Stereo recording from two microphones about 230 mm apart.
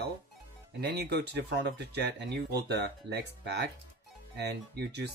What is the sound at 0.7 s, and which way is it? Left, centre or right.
Speech, right.